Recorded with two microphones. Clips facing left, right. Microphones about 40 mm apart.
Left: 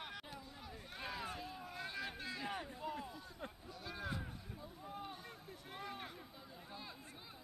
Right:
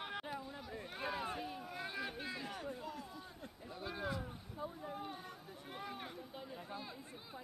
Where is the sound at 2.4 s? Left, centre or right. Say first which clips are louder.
Left 1 dB; centre.